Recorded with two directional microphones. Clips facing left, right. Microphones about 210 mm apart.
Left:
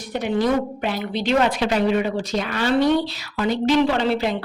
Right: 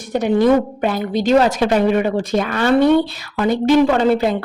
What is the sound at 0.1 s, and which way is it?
A woman's voice, 50° right (ahead or behind).